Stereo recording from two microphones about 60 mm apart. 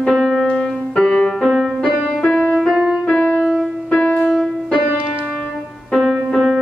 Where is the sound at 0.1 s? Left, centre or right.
Centre.